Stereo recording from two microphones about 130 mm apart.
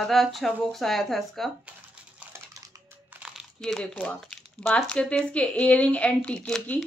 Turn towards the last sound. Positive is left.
turn(degrees=10)  # may be behind; listen again after turning